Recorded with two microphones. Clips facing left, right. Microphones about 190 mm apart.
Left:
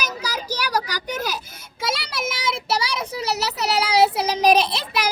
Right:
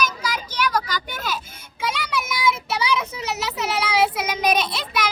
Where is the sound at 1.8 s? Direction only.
40° left (ahead or behind).